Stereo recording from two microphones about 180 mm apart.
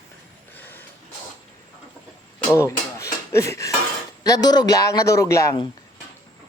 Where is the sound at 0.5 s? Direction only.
10° left (ahead or behind).